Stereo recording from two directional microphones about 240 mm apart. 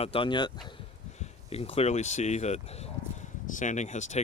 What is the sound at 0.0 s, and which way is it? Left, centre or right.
Speech, left.